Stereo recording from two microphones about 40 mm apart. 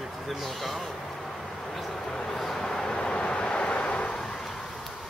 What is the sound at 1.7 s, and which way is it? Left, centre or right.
Vehicle, centre.